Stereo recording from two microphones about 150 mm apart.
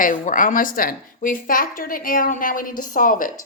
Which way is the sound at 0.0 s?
65° left (ahead or behind).